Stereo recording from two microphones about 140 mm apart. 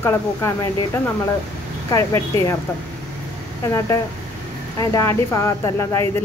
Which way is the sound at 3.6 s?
20° left (ahead or behind).